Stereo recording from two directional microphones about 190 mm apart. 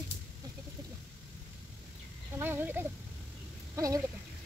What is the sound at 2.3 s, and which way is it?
Speech, 10° right (ahead or behind).